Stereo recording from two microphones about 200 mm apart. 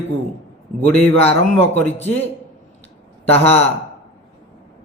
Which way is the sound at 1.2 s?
30° left (ahead or behind).